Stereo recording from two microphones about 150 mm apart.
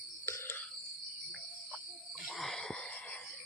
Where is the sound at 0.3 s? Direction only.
15° left (ahead or behind).